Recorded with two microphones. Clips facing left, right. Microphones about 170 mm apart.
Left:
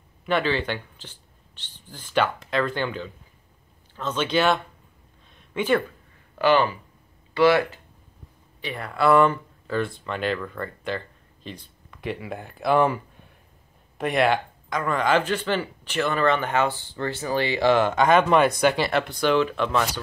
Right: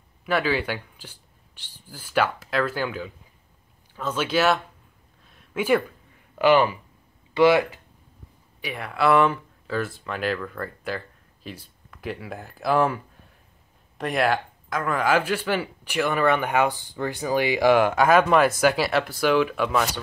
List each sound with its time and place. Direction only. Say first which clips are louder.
0.2 s speech: even; 5° right (ahead or behind)
5.3 s a sound: right 1 dB; 5° right (ahead or behind)
6.3 s speech: right 2 dB; 15° right (ahead or behind)
8.5 s speech: even; 5° right (ahead or behind)